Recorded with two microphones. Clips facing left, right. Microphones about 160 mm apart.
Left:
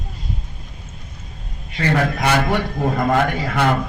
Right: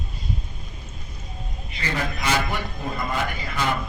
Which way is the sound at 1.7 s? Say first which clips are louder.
Left 9 dB; 65° left (ahead or behind).